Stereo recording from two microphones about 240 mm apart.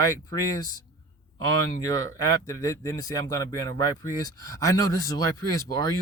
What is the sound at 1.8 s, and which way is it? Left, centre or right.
Speech, centre.